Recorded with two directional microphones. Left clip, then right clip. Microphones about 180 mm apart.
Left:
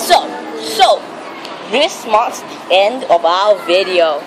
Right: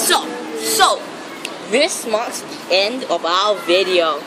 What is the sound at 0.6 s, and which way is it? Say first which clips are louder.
A woman's voice: left 4 dB; 20° right (ahead or behind).